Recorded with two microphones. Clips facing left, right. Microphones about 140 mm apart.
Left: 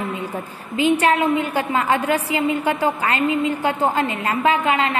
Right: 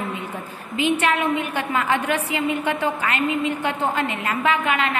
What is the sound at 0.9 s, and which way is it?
A woman's voice, 35° left (ahead or behind).